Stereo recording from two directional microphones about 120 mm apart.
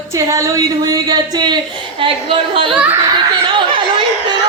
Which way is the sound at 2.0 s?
50° right (ahead or behind).